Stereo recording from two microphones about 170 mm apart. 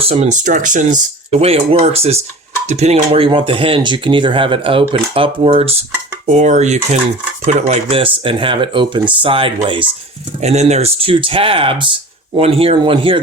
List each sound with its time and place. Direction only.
0.0 s speech: 35° right (ahead or behind)
6.2 s dishes: 45° right (ahead or behind)
7.4 s speech: 40° right (ahead or behind)
10.4 s speech: 40° right (ahead or behind)